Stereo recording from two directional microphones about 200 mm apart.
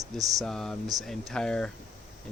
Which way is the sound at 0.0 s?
15° right (ahead or behind).